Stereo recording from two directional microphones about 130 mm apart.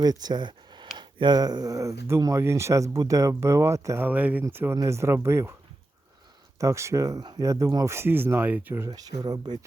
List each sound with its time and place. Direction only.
0.0 s speech: 30° right (ahead or behind)
6.6 s speech: 25° right (ahead or behind)
8.9 s speech: 30° right (ahead or behind)